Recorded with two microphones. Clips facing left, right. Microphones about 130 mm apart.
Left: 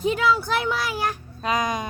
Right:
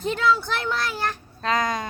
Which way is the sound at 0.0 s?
10° left (ahead or behind).